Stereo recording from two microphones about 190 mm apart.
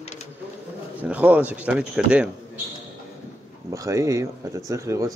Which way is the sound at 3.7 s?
15° right (ahead or behind).